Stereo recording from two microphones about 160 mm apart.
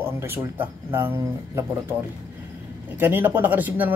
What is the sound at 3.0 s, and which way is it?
Speech, 10° right (ahead or behind).